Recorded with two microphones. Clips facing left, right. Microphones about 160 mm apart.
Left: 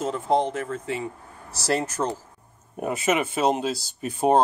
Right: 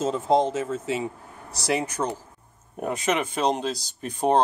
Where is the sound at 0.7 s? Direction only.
20° right (ahead or behind).